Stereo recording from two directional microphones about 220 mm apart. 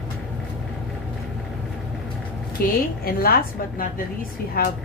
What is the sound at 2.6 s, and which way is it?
Speech, 45° left (ahead or behind).